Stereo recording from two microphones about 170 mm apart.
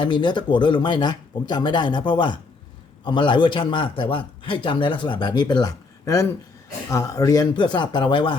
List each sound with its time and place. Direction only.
0.0 s a man's voice: 25° left (ahead or behind)